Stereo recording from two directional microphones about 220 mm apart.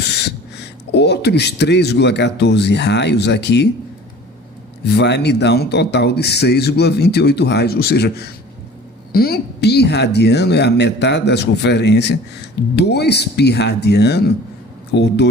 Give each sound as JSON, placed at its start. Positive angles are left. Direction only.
{"t": 0.2, "sound": "speech", "side_deg": 50}
{"t": 4.9, "sound": "speech", "side_deg": 50}